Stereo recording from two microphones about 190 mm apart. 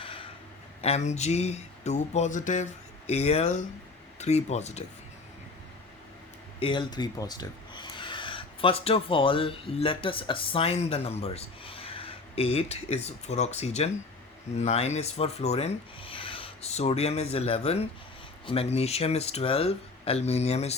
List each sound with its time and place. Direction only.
0.0 s a sound: 30° left (ahead or behind)
0.8 s speech: 35° left (ahead or behind)
6.6 s speech: 25° left (ahead or behind)